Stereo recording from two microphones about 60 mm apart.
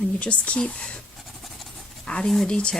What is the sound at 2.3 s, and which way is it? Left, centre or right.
Speech, centre.